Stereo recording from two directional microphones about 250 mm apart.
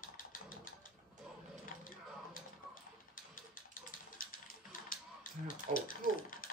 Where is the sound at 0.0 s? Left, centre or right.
Left.